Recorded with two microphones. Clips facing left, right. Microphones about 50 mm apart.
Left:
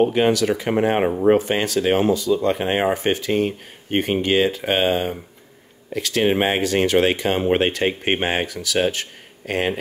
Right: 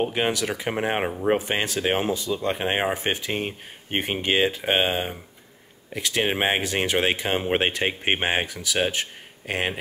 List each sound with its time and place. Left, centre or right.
0.1 s speech: centre
1.4 s speech: centre